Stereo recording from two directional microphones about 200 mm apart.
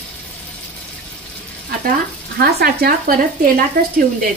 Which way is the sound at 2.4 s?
50° right (ahead or behind).